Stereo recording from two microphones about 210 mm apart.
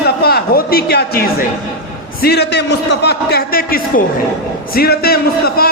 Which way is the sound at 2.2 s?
50° left (ahead or behind).